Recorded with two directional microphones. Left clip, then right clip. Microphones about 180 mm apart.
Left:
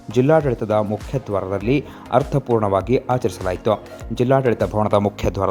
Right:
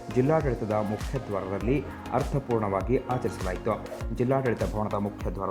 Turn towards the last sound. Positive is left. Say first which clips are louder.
# left 13 dB
turn(degrees=35)  # may be behind; listen again after turning